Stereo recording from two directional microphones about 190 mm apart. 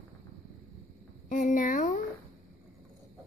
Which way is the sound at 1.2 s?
45° left (ahead or behind).